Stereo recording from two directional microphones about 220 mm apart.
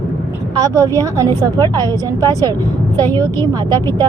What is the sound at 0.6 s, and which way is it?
Speech, 15° right (ahead or behind).